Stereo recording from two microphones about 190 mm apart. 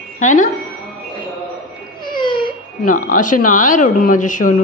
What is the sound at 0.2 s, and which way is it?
Speech, 40° left (ahead or behind).